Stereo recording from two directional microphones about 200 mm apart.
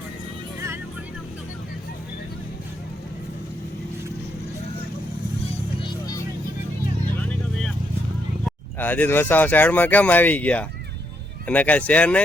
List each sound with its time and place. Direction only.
5.8 s music: 15° left (ahead or behind)
8.4 s speech: 10° left (ahead or behind)